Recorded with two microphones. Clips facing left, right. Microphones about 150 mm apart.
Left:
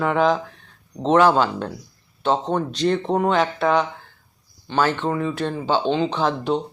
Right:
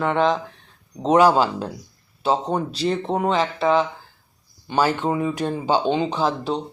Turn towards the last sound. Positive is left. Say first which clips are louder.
# left 1 dB
turn(degrees=-5)  # may be behind; listen again after turning